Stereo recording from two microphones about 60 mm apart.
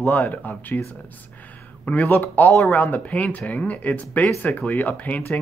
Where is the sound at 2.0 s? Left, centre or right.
Left.